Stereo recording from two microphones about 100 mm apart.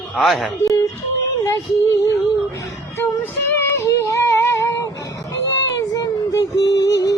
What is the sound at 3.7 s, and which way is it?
Child singing, 30° left (ahead or behind).